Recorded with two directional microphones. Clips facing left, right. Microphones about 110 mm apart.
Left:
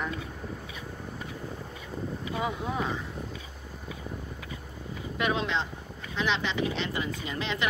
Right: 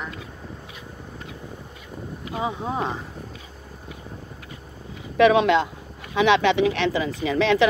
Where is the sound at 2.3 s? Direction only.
25° right (ahead or behind).